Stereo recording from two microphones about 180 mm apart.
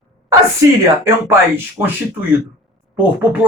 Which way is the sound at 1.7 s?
10° right (ahead or behind).